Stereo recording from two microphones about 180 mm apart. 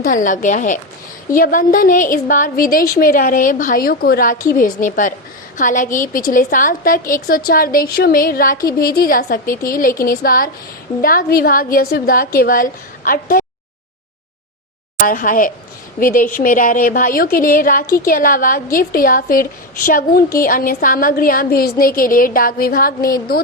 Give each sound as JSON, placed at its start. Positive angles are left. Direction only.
{"t": 0.0, "sound": "a woman's voice", "side_deg": 45}
{"t": 15.0, "sound": "a woman's voice", "side_deg": 50}